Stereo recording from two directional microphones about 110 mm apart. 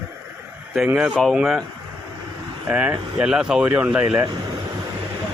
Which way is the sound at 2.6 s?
15° right (ahead or behind).